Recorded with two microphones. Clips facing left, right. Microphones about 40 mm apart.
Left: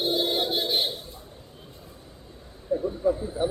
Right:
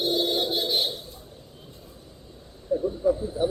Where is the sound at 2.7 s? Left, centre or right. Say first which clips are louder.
Right 1 dB; centre.